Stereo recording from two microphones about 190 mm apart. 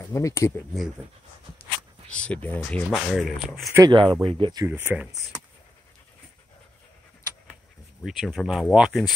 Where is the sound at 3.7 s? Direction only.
20° right (ahead or behind).